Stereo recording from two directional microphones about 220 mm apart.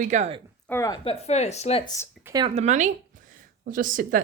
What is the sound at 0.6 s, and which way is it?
Speech, 15° left (ahead or behind).